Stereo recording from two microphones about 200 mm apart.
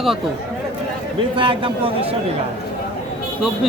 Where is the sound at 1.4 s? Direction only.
25° right (ahead or behind).